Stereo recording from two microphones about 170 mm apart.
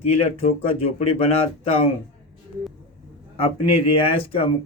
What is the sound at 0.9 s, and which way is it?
Speech, 35° left (ahead or behind).